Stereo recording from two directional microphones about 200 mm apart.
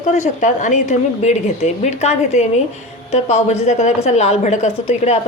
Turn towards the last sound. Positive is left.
turn(degrees=30)  # may be behind; listen again after turning